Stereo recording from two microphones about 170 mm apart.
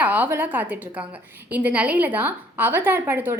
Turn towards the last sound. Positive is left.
turn(degrees=-10)  # may be behind; listen again after turning